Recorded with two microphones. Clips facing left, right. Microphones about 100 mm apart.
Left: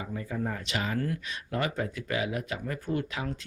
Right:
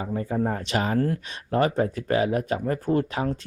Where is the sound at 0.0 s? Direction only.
40° right (ahead or behind).